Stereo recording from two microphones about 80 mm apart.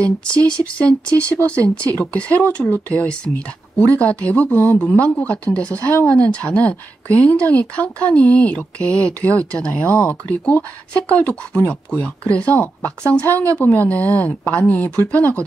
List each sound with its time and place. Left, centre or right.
0.0 s speech: centre